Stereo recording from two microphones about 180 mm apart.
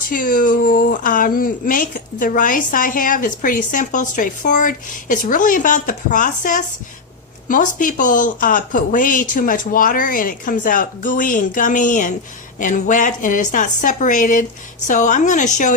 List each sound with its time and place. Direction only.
0.1 s speech: 50° left (ahead or behind)